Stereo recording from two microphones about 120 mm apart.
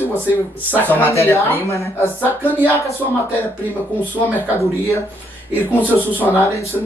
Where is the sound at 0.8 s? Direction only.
25° left (ahead or behind).